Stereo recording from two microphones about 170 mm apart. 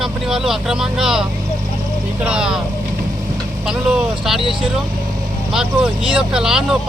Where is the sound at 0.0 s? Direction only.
Centre (ahead or behind).